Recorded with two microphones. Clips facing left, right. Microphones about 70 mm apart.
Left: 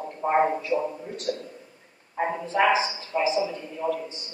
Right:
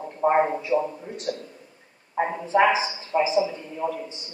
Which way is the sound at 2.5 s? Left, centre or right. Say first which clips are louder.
Right 2 dB; right.